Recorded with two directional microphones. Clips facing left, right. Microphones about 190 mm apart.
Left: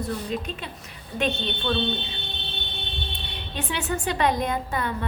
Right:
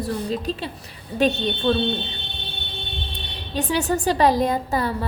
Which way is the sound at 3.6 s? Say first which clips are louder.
Right 7 dB; 40° right (ahead or behind).